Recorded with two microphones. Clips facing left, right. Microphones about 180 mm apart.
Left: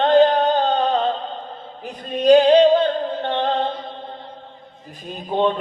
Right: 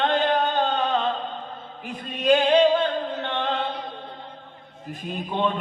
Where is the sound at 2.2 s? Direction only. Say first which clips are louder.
Left 6 dB; 35° left (ahead or behind).